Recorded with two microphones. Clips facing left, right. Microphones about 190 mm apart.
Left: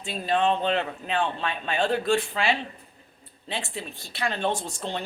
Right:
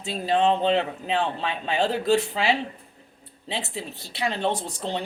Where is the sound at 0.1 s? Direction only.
25° right (ahead or behind).